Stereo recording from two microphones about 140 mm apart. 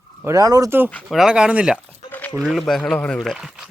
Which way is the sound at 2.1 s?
10° left (ahead or behind).